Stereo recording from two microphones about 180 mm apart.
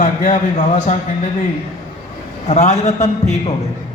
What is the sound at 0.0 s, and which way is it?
Speech, 40° left (ahead or behind).